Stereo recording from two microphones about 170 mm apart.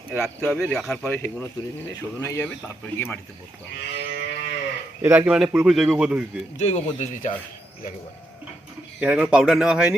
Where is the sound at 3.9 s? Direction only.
80° left.